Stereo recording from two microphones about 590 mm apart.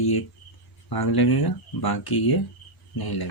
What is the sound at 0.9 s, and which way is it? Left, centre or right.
Speech, left.